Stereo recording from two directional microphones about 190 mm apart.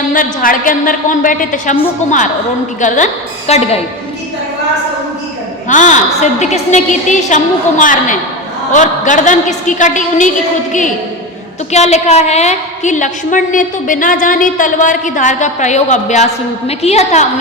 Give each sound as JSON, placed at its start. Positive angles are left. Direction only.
{"t": 0.1, "sound": "a woman's voice", "side_deg": 45}
{"t": 5.6, "sound": "a woman's voice", "side_deg": 40}